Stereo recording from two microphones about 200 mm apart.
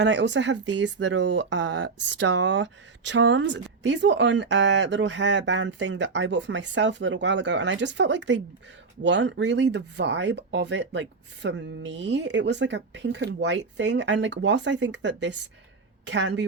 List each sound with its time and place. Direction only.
0.0 s speech: 60° right (ahead or behind)